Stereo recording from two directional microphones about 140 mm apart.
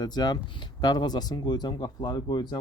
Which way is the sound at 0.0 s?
30° left (ahead or behind).